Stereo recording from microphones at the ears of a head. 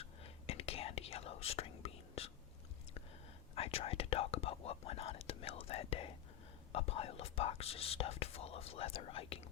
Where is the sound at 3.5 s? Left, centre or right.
Left.